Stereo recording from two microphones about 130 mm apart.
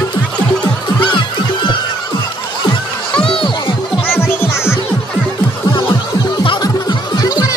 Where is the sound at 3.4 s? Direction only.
40° left (ahead or behind).